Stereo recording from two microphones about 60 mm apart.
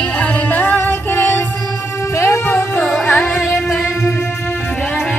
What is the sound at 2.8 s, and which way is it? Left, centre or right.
Music, centre.